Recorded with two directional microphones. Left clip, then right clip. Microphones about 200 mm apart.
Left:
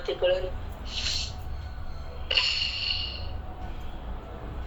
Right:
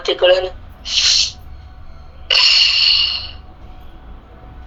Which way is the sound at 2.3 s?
45° right (ahead or behind).